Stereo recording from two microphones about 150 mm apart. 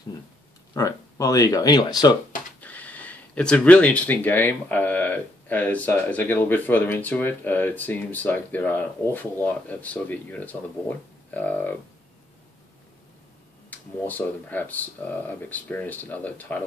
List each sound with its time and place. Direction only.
0.7 s speech: 20° left (ahead or behind)
2.6 s speech: 10° left (ahead or behind)
13.7 s speech: 10° left (ahead or behind)